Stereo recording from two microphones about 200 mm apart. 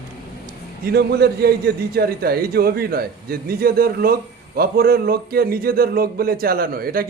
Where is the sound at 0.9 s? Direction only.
55° right (ahead or behind).